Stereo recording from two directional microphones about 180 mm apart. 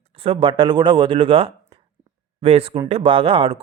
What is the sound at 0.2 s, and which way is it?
Speech, 30° right (ahead or behind).